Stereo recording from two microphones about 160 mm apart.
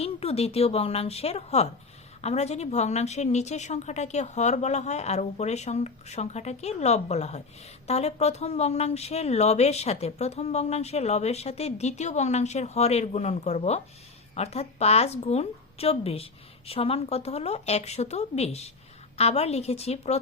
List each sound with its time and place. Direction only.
0.0 s a woman's voice: 40° left (ahead or behind)